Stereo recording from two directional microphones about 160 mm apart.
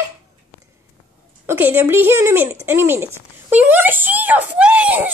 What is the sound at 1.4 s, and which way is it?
Speech, 15° right (ahead or behind).